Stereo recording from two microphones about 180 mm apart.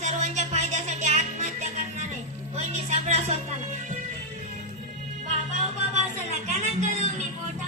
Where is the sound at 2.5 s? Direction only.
35° right (ahead or behind).